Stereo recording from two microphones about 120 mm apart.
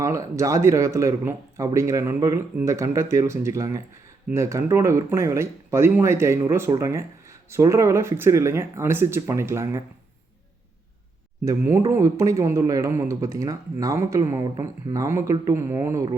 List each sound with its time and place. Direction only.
0.0 s speech: 25° right (ahead or behind)
11.4 s speech: 25° right (ahead or behind)